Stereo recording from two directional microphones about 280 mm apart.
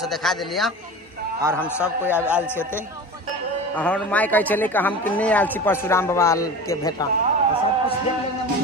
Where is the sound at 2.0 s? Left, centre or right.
Centre.